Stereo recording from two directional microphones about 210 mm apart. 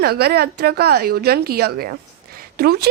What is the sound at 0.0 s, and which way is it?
Speech, 50° right (ahead or behind).